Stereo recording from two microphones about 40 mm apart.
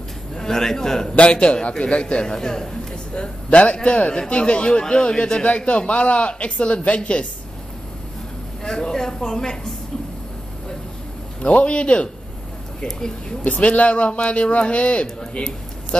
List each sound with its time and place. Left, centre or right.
0.4 s speech: centre
1.1 s speech: left; by 2.9 s centre
3.2 s a man's voice: left
8.6 s speech: centre
11.4 s a man's voice: left
13.6 s a man's voice: left